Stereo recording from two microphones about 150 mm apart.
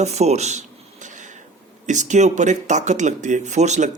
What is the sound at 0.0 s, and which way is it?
Speech, 45° right (ahead or behind).